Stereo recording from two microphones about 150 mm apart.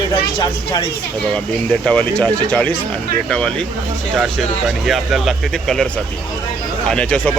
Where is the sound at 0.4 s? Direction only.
30° left (ahead or behind).